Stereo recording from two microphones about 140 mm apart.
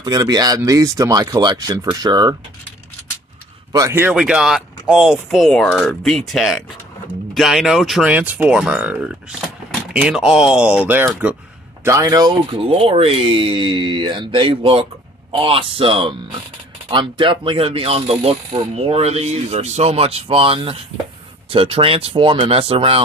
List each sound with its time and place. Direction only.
0.0 s speech: 30° right (ahead or behind)
3.7 s speech: 20° right (ahead or behind)
4.1 s speech: 5° right (ahead or behind)
11.8 s speech: 20° right (ahead or behind); by 22.9 s 45° right (ahead or behind)